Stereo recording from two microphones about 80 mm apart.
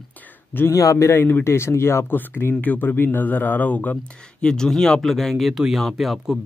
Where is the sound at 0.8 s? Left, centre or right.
Left.